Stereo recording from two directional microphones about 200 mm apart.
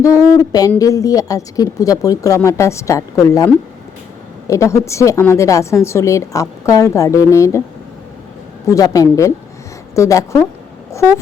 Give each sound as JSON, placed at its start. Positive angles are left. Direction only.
{"t": 0.0, "sound": "a woman's voice", "side_deg": 15}
{"t": 8.7, "sound": "a woman's voice", "side_deg": 15}